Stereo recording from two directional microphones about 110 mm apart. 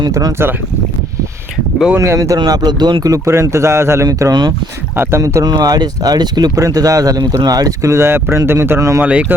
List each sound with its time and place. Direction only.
0.1 s speech: 35° right (ahead or behind)
2.0 s speech: 30° right (ahead or behind)
4.9 s speech: 25° right (ahead or behind)